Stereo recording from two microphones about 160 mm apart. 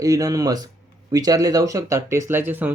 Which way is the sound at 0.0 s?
20° right (ahead or behind).